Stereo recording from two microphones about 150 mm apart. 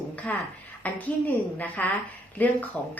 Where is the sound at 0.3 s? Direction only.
10° left (ahead or behind).